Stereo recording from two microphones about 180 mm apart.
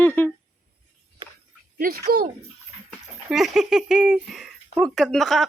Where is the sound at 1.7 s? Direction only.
55° right (ahead or behind).